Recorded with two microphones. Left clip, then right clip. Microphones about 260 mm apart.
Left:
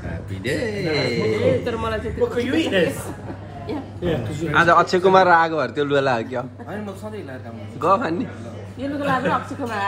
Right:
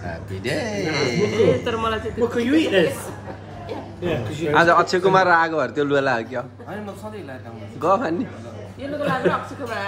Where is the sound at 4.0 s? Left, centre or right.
Centre.